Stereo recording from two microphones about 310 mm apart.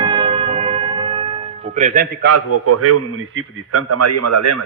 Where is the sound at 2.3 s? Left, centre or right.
Right.